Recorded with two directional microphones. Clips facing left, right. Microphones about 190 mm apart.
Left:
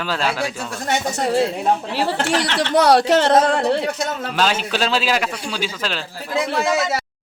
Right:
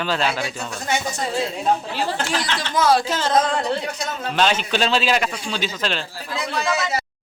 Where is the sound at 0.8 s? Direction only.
65° left (ahead or behind).